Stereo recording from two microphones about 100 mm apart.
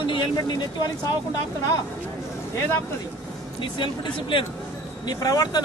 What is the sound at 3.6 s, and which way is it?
Speech, 55° left (ahead or behind).